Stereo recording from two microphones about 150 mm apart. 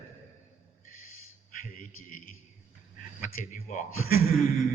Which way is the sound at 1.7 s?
70° left (ahead or behind).